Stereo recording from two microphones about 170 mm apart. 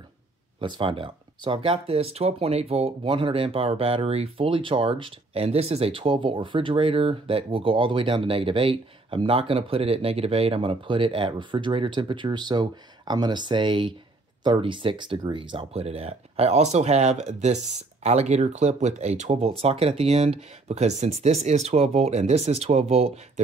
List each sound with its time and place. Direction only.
0.6 s speech: 30° right (ahead or behind)